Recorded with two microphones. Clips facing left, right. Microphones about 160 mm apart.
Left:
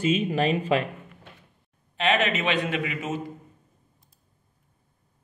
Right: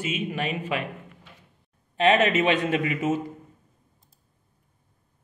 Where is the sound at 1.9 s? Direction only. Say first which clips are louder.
Right 4 dB; 40° right (ahead or behind).